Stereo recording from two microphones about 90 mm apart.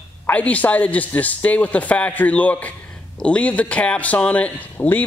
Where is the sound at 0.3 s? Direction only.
15° left (ahead or behind).